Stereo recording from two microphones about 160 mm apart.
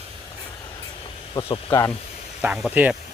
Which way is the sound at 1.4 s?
30° left (ahead or behind).